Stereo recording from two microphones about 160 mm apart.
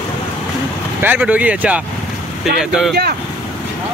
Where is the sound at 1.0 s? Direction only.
10° right (ahead or behind).